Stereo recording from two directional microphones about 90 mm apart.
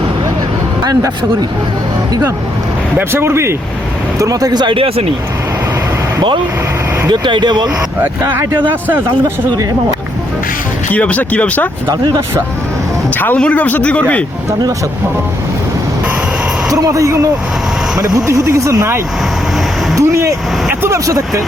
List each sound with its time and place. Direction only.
0.9 s speech: 45° right (ahead or behind)
3.0 s speech: 25° right (ahead or behind)
4.2 s speech: 40° right (ahead or behind); by 5.0 s 80° right
7.1 s speech: 60° right (ahead or behind)
8.2 s speech: 25° right (ahead or behind)
10.9 s speech: 15° left (ahead or behind)
13.1 s a man's voice: 20° left (ahead or behind)
16.6 s speech: 35° right (ahead or behind)
18.3 s speech: 35° right (ahead or behind)
20.0 s vehicle: 35° right (ahead or behind)
20.9 s speech: 35° right (ahead or behind)